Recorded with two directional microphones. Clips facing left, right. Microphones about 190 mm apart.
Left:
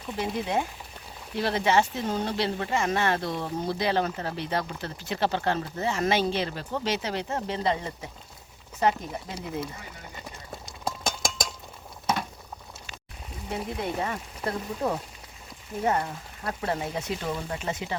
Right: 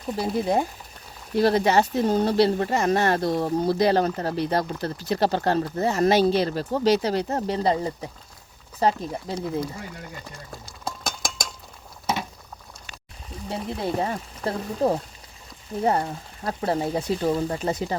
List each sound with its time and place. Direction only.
0.1 s speech: 40° right (ahead or behind)
10.5 s clip-clop: centre (ahead or behind)
13.5 s speech: 30° right (ahead or behind)